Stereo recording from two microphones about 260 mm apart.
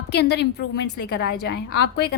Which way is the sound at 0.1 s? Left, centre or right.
Left.